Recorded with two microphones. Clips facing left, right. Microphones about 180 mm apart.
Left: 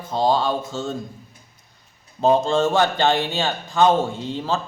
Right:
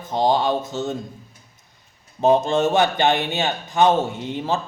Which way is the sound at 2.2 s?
20° right (ahead or behind).